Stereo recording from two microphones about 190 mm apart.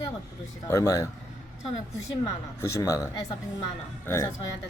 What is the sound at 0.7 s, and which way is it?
Speech, 15° left (ahead or behind).